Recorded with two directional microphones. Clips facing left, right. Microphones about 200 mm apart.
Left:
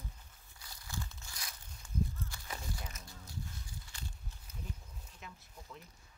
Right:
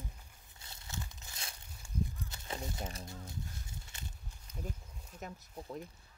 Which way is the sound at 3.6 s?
25° right (ahead or behind).